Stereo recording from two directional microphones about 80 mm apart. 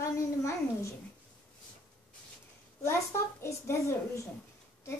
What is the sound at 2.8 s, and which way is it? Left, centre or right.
A child's voice, left.